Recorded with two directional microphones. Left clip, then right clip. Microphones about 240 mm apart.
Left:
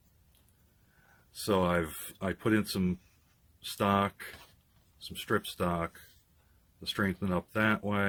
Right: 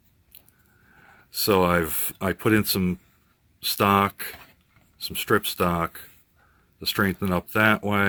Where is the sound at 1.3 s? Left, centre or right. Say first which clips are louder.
Right 9 dB; right.